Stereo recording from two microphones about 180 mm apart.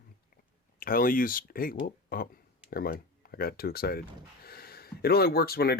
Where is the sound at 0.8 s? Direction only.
55° left (ahead or behind).